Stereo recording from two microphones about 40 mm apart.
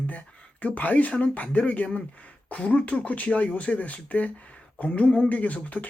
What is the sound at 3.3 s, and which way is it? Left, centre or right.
Speech, left.